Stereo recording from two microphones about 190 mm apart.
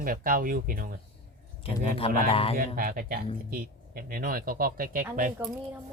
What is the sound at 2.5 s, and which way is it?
Speech, 50° right (ahead or behind).